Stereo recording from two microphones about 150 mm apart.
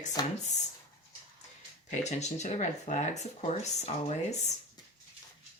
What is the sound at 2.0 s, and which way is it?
Speech, 50° left (ahead or behind).